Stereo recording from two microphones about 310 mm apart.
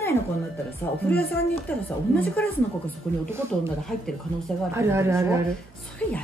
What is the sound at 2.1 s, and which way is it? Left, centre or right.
Speech, centre.